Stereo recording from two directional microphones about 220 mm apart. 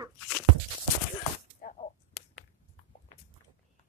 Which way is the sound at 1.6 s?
35° left (ahead or behind).